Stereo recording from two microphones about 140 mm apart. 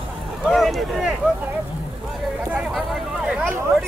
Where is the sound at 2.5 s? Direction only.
Centre (ahead or behind).